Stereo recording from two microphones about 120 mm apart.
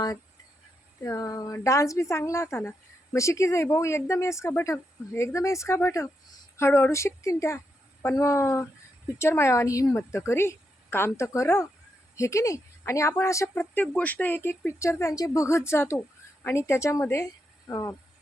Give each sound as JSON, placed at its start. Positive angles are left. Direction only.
{"t": 1.0, "sound": "a woman's voice", "side_deg": 30}